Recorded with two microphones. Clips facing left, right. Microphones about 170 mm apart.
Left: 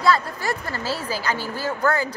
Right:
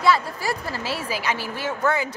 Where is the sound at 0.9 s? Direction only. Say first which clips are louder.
Left 2 dB; 30° left (ahead or behind).